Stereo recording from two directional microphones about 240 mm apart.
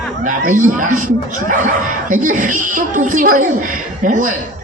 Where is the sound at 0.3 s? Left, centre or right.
Right.